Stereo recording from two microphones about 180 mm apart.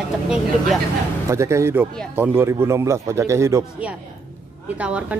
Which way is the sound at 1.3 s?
15° right (ahead or behind).